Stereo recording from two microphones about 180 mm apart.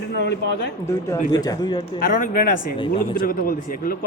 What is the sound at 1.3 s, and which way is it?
Speech, 20° left (ahead or behind).